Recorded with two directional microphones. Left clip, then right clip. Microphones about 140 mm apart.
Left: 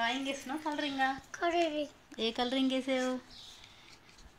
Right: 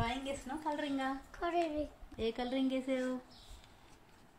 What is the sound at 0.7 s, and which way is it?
Speech, 35° left (ahead or behind).